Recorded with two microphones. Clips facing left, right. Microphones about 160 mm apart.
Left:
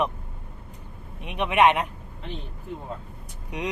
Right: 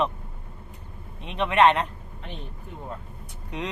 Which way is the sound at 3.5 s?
15° left (ahead or behind).